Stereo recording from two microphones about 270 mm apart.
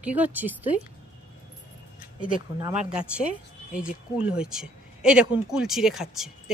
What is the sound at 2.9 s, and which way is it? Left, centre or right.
Speech, centre.